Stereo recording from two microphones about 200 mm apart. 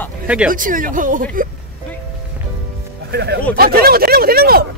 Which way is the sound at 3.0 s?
55° right (ahead or behind).